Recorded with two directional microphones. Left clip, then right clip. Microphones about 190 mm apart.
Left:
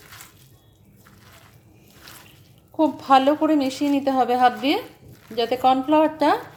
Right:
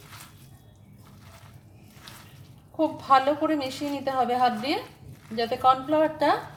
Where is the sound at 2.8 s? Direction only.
35° left (ahead or behind).